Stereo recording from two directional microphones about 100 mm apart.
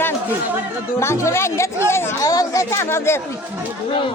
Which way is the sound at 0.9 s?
30° left (ahead or behind).